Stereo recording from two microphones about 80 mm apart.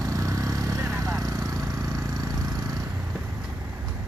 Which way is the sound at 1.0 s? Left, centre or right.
Right.